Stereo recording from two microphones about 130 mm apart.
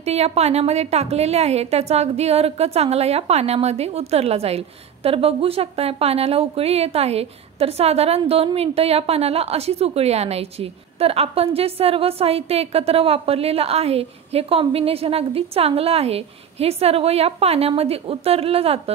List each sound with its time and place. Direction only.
0.0 s a woman's voice: 55° right (ahead or behind)